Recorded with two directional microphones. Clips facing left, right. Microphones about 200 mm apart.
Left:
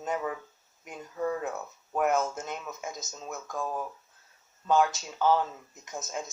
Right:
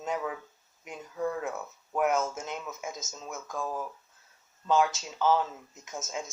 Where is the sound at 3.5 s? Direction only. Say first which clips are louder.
Left 1 dB; 20° left (ahead or behind).